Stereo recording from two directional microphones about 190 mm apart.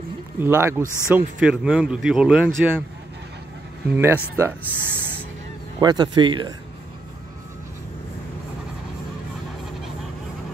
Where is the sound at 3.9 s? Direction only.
10° right (ahead or behind).